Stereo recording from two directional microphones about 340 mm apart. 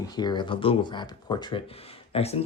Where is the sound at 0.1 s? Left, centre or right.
Centre.